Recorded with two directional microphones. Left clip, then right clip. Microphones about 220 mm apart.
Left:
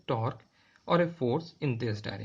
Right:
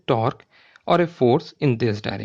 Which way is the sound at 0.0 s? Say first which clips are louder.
Right 11 dB; 45° right (ahead or behind).